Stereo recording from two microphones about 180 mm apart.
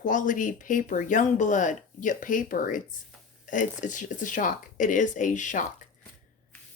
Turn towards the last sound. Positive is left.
turn(degrees=45)  # may be behind; listen again after turning